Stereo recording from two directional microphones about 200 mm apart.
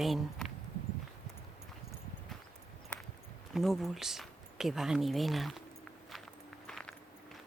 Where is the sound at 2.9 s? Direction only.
5° left (ahead or behind).